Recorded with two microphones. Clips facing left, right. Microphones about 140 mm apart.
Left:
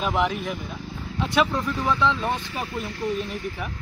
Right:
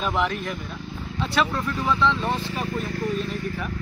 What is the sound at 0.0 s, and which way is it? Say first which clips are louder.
Speech: left 1 dB; 10° left (ahead or behind).